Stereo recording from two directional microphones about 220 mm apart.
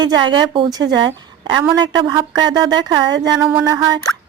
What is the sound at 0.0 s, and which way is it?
Speech, 20° right (ahead or behind).